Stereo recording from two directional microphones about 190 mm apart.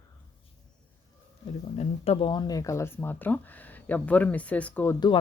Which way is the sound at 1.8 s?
30° left (ahead or behind).